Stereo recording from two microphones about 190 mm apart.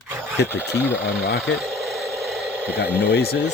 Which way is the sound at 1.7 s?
Centre (ahead or behind).